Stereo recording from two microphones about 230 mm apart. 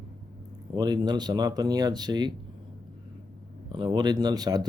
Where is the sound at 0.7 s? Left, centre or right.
Centre.